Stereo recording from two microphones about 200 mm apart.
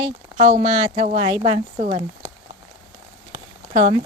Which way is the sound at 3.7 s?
35° right (ahead or behind).